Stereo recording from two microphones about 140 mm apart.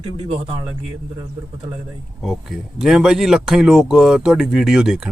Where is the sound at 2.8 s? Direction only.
5° right (ahead or behind).